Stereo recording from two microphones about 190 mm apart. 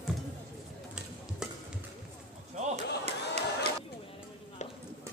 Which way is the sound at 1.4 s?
5° right (ahead or behind).